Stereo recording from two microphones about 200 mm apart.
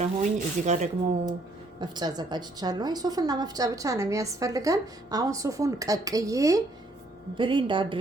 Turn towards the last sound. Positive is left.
turn(degrees=-25)  # may be behind; listen again after turning